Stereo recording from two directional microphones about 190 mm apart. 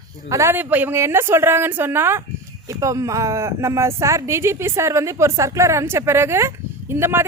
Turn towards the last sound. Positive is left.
turn(degrees=-10)  # may be behind; listen again after turning